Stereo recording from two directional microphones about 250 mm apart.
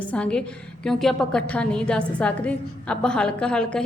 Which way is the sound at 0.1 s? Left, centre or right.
Centre.